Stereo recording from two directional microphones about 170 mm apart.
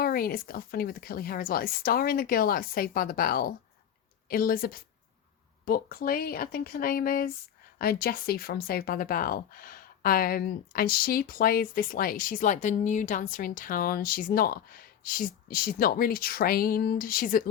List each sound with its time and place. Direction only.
0.0 s speech: 60° left (ahead or behind)